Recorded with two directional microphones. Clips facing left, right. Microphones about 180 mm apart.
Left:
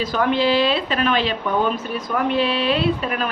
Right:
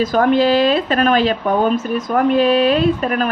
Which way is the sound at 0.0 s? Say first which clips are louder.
Right 5 dB; 45° right (ahead or behind).